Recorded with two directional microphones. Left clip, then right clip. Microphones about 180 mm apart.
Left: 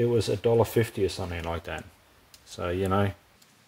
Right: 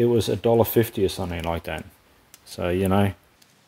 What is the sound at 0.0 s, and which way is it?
Speech, 40° right (ahead or behind).